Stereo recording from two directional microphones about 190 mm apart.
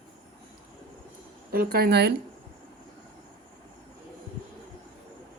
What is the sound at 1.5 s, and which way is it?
Speech, 55° right (ahead or behind).